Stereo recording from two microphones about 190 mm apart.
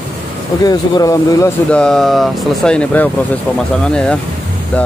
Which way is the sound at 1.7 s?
5° left (ahead or behind).